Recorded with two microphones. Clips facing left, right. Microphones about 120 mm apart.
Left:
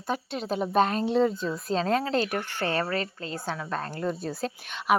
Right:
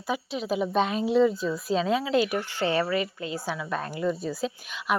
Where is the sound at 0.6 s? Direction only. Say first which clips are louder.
Left 3 dB; 45° left (ahead or behind).